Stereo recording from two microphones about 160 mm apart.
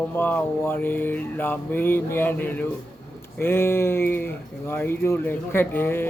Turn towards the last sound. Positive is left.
turn(degrees=10)  # may be behind; listen again after turning